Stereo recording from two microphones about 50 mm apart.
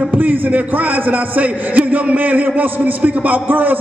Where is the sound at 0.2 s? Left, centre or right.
Right.